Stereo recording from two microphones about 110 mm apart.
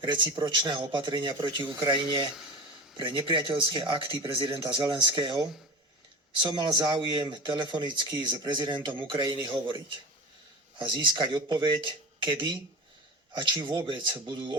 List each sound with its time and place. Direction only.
0.0 s a man's voice: 45° right (ahead or behind)